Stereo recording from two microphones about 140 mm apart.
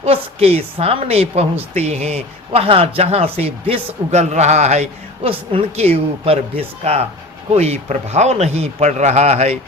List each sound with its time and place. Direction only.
0.0 s a woman's voice: 45° right (ahead or behind)